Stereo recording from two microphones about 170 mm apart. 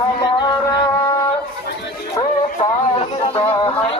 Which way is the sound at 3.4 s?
35° left (ahead or behind).